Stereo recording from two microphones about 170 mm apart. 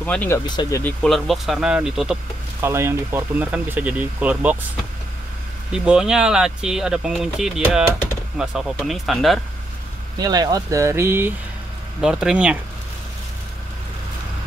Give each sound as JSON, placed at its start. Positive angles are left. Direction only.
{"t": 0.0, "sound": "speech", "side_deg": 10}
{"t": 0.5, "sound": "speech", "side_deg": 20}
{"t": 1.0, "sound": "speech", "side_deg": 0}
{"t": 2.6, "sound": "speech", "side_deg": -15}
{"t": 5.7, "sound": "speech", "side_deg": -5}
{"t": 10.1, "sound": "speech", "side_deg": -25}